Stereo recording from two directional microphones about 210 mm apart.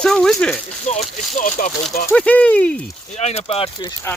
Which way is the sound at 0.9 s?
35° left (ahead or behind).